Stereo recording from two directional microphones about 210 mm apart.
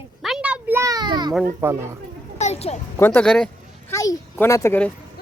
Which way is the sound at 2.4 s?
30° left (ahead or behind).